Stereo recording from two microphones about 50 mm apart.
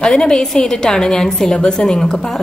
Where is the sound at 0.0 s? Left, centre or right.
Centre.